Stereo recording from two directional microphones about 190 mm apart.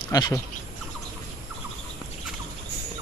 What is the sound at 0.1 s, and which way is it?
Speech, 20° left (ahead or behind).